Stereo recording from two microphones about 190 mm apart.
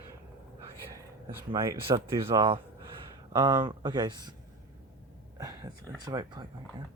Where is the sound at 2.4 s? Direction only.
30° right (ahead or behind).